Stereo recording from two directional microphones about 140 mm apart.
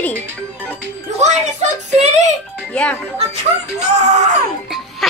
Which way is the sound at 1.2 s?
55° right (ahead or behind).